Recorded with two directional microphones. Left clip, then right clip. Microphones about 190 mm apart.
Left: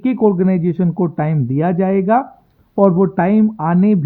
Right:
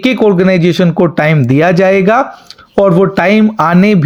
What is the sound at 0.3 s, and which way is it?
Speech, 20° right (ahead or behind).